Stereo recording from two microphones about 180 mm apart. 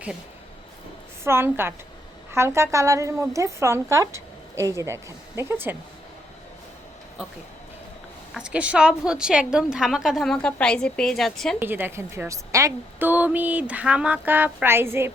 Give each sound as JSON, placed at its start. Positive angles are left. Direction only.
{"t": 1.2, "sound": "a woman's voice", "side_deg": -15}
{"t": 7.2, "sound": "a woman's voice", "side_deg": -5}
{"t": 11.6, "sound": "a woman's voice", "side_deg": -10}